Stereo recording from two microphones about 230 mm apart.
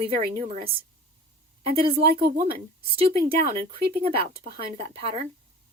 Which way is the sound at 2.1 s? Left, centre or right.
Right.